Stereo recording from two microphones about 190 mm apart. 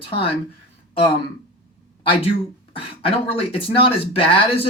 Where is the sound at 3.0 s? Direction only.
30° left (ahead or behind).